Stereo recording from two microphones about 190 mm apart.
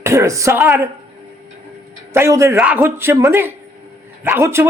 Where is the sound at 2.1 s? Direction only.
15° right (ahead or behind).